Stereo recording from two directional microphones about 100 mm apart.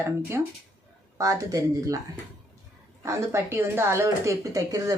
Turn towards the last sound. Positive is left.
turn(degrees=-35)  # may be behind; listen again after turning